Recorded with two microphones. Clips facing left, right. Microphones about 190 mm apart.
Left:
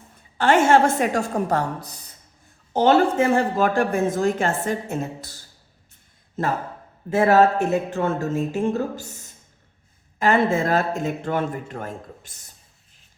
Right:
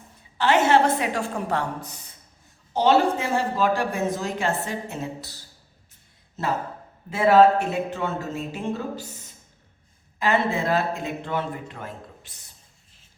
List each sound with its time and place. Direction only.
0.3 s speech: 50° left (ahead or behind)
2.7 s speech: 50° left (ahead or behind)
10.2 s speech: 50° left (ahead or behind)